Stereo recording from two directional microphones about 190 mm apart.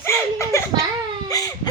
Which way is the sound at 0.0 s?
15° left (ahead or behind).